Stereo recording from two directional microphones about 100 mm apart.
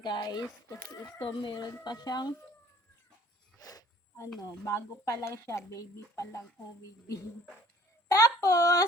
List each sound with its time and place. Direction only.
0.0 s speech: 45° left (ahead or behind)
1.4 s speech: 50° left (ahead or behind)
3.6 s snake: 40° left (ahead or behind)
4.4 s speech: 35° left (ahead or behind)
8.0 s a sound: 30° left (ahead or behind)